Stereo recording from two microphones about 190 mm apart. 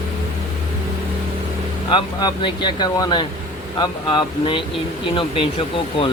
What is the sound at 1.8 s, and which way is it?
Speech, 25° left (ahead or behind).